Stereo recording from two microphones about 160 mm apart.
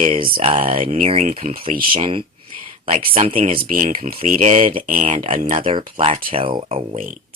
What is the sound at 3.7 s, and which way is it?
Speech, 55° right (ahead or behind).